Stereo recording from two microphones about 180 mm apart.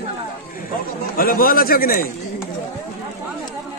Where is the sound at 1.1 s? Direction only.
55° left (ahead or behind).